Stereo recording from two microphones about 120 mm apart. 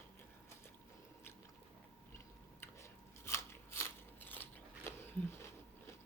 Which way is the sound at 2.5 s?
25° left (ahead or behind).